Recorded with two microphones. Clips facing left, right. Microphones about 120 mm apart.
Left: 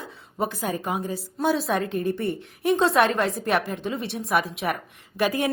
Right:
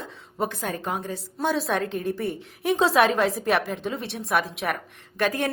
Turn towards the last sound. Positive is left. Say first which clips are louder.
# left 1 dB
turn(degrees=5)  # may be behind; listen again after turning